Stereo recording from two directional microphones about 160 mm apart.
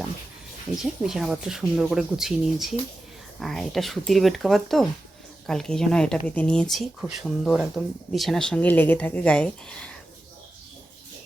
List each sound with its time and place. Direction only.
0.8 s speech: 5° right (ahead or behind)